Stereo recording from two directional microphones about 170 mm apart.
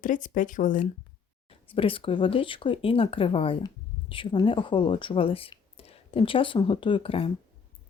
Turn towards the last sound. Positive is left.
turn(degrees=30)  # may be behind; listen again after turning